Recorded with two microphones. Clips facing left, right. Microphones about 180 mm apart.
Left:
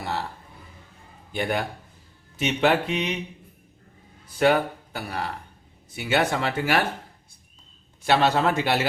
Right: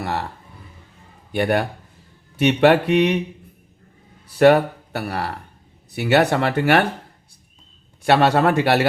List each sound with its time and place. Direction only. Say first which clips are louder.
0.0 s a sound: right 4 dB; 60° right (ahead or behind)
1.3 s speech: right 7 dB; 60° right (ahead or behind)
4.3 s speech: right 7 dB; 65° right (ahead or behind)
8.0 s speech: right 5 dB; 65° right (ahead or behind)